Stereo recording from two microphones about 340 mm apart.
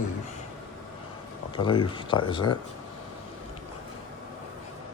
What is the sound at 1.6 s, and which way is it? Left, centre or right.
Speech, centre.